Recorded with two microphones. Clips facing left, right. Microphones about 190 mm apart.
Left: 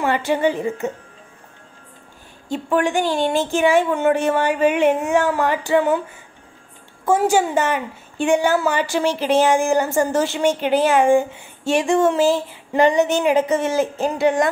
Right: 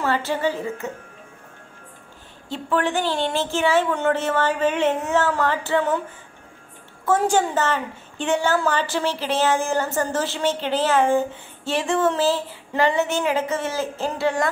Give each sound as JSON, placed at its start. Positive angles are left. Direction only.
{"t": 0.0, "sound": "a woman's voice", "side_deg": 15}
{"t": 2.5, "sound": "a woman's voice", "side_deg": 15}
{"t": 7.1, "sound": "a woman's voice", "side_deg": 10}